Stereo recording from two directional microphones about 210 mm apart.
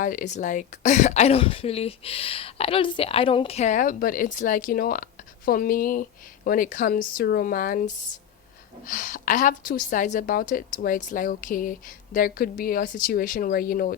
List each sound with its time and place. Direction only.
0.0 s speech: 40° left (ahead or behind)